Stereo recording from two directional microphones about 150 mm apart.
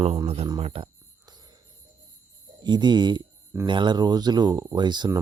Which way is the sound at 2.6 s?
30° right (ahead or behind).